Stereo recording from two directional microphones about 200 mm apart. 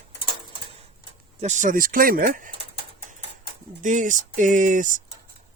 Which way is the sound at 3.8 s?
40° right (ahead or behind).